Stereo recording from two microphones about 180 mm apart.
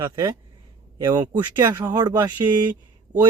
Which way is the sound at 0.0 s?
20° right (ahead or behind).